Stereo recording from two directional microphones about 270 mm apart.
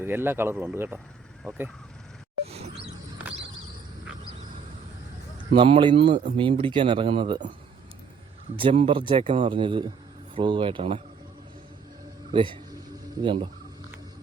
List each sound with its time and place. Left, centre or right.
0.0 s speech: centre
5.5 s speech: centre
8.5 s speech: right
12.3 s a sound: centre
13.2 s speech: centre